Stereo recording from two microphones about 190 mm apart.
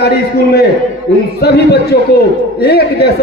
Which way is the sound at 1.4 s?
60° left (ahead or behind).